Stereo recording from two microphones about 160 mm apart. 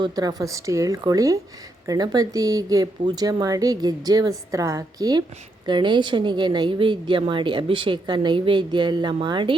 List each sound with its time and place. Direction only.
0.0 s a woman's voice: 25° right (ahead or behind)